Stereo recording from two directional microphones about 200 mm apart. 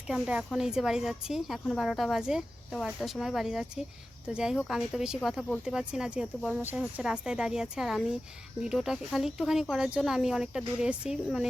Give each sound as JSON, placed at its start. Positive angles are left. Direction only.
{"t": 0.1, "sound": "speech", "side_deg": -5}